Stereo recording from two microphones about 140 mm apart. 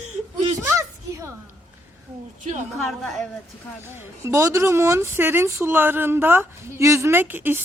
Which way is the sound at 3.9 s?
15° right (ahead or behind).